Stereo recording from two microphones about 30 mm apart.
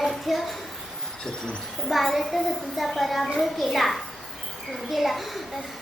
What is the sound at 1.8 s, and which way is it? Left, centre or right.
A child's voice, centre.